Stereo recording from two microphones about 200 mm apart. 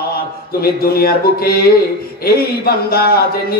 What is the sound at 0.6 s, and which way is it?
A man's voice, 50° left (ahead or behind).